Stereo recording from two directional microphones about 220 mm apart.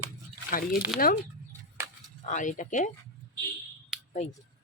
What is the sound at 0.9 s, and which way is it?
Speech, centre (ahead or behind).